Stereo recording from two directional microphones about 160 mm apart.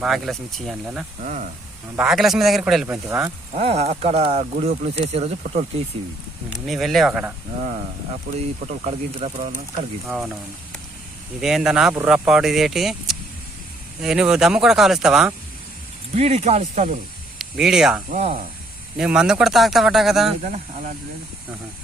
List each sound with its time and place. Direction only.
0.0 s speech: centre (ahead or behind)
1.2 s speech: 50° right (ahead or behind)
2.0 s speech: centre (ahead or behind)
3.1 s speech: 15° right (ahead or behind)
3.6 s speech: 40° right (ahead or behind)
6.7 s speech: centre (ahead or behind)
8.6 s speech: 45° right (ahead or behind)
10.1 s speech: centre (ahead or behind)
11.3 s speech: 5° right (ahead or behind)
16.1 s speech: 40° right (ahead or behind)
17.3 s speech: 5° right (ahead or behind)
18.1 s speech: 55° right (ahead or behind)
18.9 s speech: 5° right (ahead or behind)
20.4 s speech: 45° right (ahead or behind)